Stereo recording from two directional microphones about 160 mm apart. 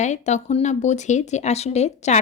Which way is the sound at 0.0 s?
45° left (ahead or behind).